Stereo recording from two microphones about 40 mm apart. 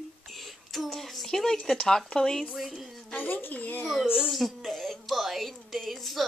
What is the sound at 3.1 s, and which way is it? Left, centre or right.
Speech, left.